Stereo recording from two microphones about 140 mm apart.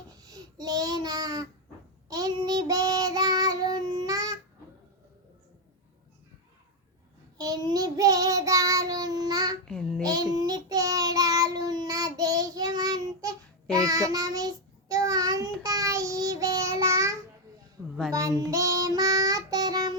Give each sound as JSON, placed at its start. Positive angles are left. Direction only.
{"t": 0.2, "sound": "child singing", "side_deg": -25}
{"t": 7.3, "sound": "child singing", "side_deg": -25}